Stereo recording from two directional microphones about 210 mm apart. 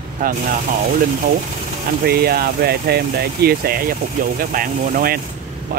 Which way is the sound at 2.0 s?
45° right (ahead or behind).